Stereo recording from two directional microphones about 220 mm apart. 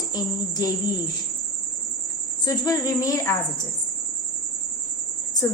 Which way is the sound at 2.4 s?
15° left (ahead or behind).